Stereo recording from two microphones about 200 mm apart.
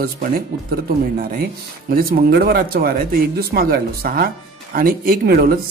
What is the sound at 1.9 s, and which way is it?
Speech, 50° right (ahead or behind).